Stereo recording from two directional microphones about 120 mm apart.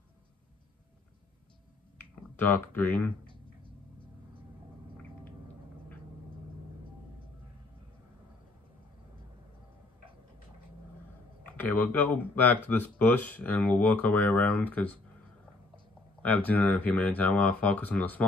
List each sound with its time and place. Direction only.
2.3 s speech: 15° left (ahead or behind)
11.4 s speech: 15° left (ahead or behind)